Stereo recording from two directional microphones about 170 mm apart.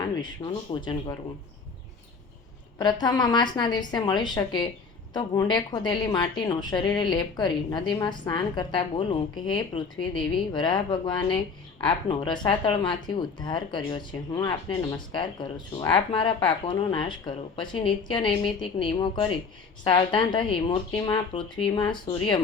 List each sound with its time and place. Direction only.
0.2 s speech: 25° left (ahead or behind)
2.7 s speech: 25° left (ahead or behind)